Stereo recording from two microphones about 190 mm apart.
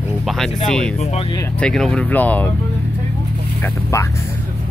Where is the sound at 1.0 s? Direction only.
30° left (ahead or behind).